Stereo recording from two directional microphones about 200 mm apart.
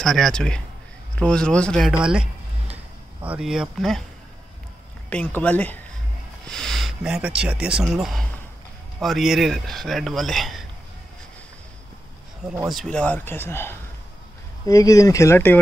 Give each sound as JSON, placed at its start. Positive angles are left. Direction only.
{"t": 0.0, "sound": "speech", "side_deg": 0}
{"t": 3.2, "sound": "speech", "side_deg": -5}
{"t": 5.1, "sound": "speech", "side_deg": 10}
{"t": 12.4, "sound": "speech", "side_deg": -5}